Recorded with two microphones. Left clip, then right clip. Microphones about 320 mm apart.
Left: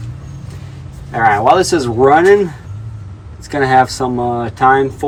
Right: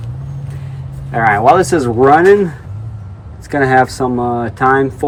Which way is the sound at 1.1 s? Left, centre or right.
Centre.